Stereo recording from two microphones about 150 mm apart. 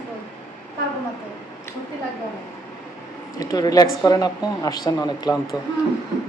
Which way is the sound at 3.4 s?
25° left (ahead or behind).